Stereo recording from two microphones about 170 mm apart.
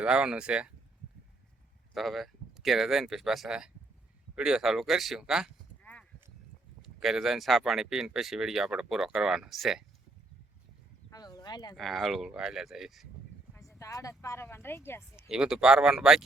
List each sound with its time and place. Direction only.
0.0 s speech: 5° right (ahead or behind)
1.9 s speech: centre (ahead or behind)
5.8 s clip-clop: 10° left (ahead or behind)
6.8 s speech: centre (ahead or behind)
11.1 s a sound: 25° left (ahead or behind)
11.8 s speech: centre (ahead or behind)
13.7 s speech: 20° left (ahead or behind)
15.1 s speech: 5° right (ahead or behind)